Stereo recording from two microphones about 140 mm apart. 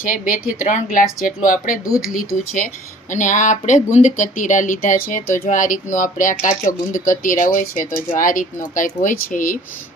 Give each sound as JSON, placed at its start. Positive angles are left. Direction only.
{"t": 0.0, "sound": "speech", "side_deg": 75}
{"t": 3.1, "sound": "speech", "side_deg": 65}